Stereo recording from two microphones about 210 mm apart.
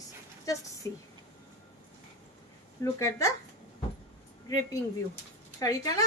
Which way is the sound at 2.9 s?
15° left (ahead or behind).